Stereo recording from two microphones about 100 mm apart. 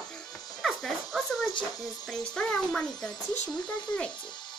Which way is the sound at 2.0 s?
10° left (ahead or behind).